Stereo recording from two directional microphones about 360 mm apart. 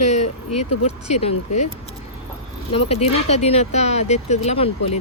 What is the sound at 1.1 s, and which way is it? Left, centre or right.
Speech, centre.